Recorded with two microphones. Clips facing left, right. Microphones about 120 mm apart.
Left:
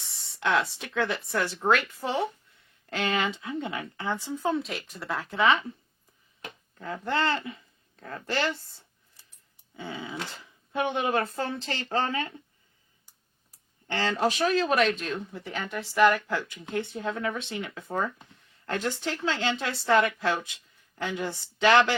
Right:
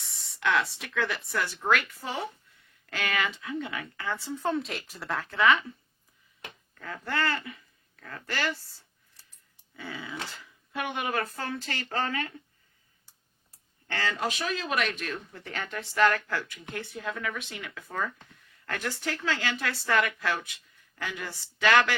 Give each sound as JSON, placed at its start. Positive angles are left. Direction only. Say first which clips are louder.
{"t": 0.0, "sound": "a sound", "louder": "even", "side_deg": 30}
{"t": 0.9, "sound": "speech", "louder": "left 3 dB", "side_deg": 25}
{"t": 4.5, "sound": "speech", "louder": "left 1 dB", "side_deg": 0}
{"t": 5.1, "sound": "speech", "louder": "left 1 dB", "side_deg": 15}
{"t": 6.7, "sound": "speech", "louder": "left 3 dB", "side_deg": 20}
{"t": 13.8, "sound": "speech", "louder": "left 3 dB", "side_deg": 20}
{"t": 14.1, "sound": "speech", "louder": "left 8 dB", "side_deg": 35}
{"t": 15.3, "sound": "speech", "louder": "left 3 dB", "side_deg": 15}